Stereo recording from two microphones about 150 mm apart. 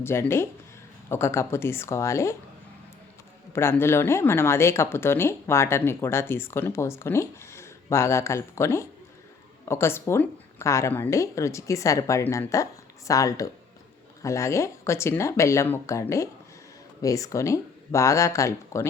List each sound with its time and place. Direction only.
0.0 s speech: 15° left (ahead or behind)
3.5 s a woman's voice: 15° left (ahead or behind)